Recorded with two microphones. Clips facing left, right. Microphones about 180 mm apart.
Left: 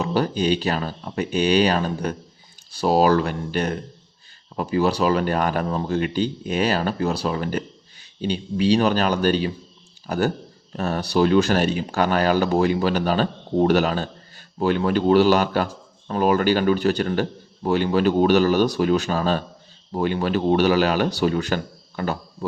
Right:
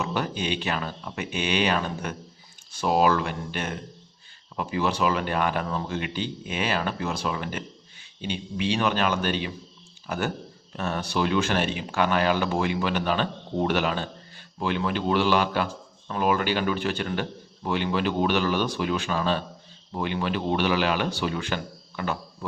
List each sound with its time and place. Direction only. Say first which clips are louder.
0.0 s speech: left 7 dB; 35° left (ahead or behind)